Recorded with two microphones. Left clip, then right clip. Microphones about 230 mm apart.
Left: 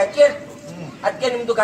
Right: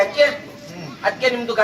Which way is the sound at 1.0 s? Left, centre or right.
Left.